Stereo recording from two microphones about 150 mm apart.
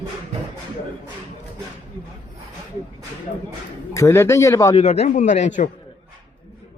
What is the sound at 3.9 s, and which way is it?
Speech, 20° left (ahead or behind).